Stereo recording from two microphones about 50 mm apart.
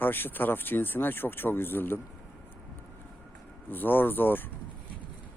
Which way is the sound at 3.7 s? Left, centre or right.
Left.